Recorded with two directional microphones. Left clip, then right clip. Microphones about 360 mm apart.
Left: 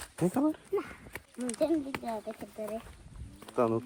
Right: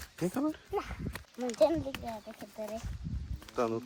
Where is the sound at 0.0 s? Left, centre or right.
Centre.